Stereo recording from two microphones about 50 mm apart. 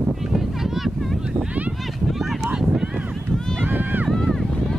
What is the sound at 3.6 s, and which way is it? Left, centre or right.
Run, right.